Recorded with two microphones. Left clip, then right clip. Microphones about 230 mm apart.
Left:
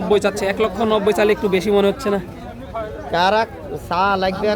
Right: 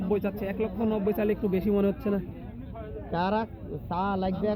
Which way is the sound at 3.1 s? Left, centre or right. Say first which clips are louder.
Left 12 dB; centre.